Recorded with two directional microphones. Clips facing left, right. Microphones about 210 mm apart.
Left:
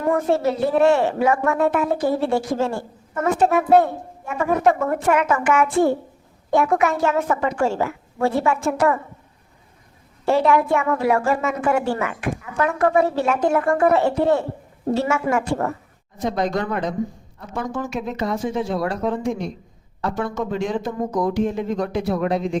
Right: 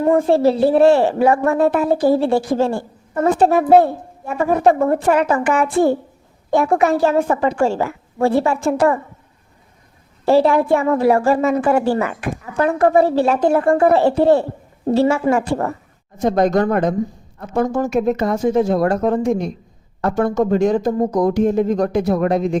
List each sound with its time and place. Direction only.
0.0 s a woman's voice: 30° right (ahead or behind)
10.2 s a woman's voice: 35° right (ahead or behind)
16.2 s speech: 45° right (ahead or behind)